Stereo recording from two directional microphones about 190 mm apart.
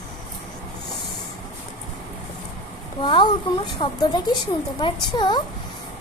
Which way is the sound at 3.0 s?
25° left (ahead or behind).